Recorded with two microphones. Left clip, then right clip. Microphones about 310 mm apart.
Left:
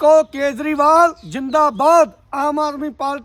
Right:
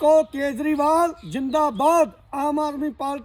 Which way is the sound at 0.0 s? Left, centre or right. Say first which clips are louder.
Left 5 dB; centre.